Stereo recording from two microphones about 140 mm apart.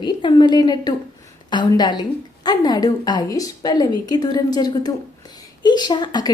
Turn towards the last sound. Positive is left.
turn(degrees=30)  # may be behind; listen again after turning